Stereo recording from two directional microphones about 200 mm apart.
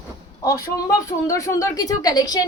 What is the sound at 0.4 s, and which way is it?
A woman's voice, 15° left (ahead or behind).